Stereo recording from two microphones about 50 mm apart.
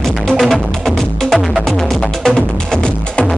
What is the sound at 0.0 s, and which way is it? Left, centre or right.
Music, centre.